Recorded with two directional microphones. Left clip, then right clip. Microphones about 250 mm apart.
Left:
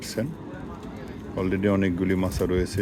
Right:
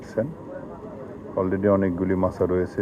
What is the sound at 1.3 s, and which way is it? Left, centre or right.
Speech, left.